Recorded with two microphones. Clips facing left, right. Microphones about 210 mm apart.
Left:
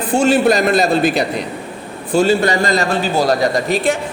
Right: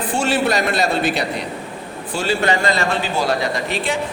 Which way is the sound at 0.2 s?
45° left (ahead or behind).